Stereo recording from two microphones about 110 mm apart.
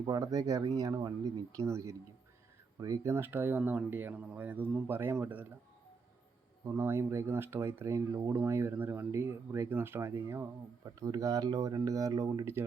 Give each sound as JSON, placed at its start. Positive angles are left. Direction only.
{"t": 0.0, "sound": "speech", "side_deg": -35}
{"t": 6.7, "sound": "speech", "side_deg": -25}